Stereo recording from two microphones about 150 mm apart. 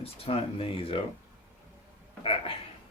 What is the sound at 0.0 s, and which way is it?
Speech, 40° left (ahead or behind).